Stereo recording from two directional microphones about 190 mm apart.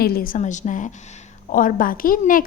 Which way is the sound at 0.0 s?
50° left (ahead or behind).